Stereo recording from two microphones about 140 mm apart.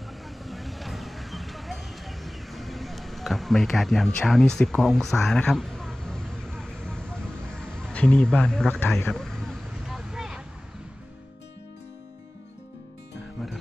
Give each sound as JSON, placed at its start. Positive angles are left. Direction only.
{"t": 0.5, "sound": "vehicle", "side_deg": 0}